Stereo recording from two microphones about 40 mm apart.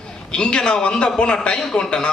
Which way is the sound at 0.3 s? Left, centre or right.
Left.